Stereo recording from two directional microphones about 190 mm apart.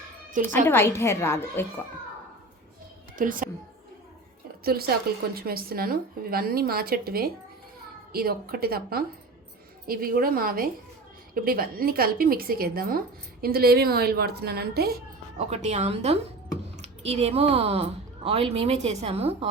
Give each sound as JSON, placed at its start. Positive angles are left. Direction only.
{"t": 0.3, "sound": "a woman's voice", "side_deg": -45}
{"t": 0.7, "sound": "a woman's voice", "side_deg": 10}
{"t": 3.2, "sound": "a woman's voice", "side_deg": -45}
{"t": 4.6, "sound": "a woman's voice", "side_deg": -55}
{"t": 15.4, "sound": "a woman's voice", "side_deg": -35}